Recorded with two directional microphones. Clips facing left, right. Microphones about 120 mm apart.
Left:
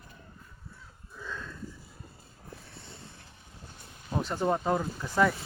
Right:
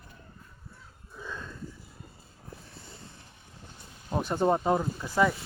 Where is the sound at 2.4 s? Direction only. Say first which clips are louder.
Even; centre (ahead or behind).